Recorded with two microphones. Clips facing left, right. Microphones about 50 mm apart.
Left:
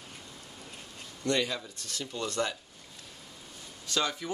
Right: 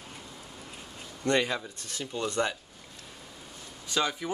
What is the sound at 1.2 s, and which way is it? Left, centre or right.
Speech, right.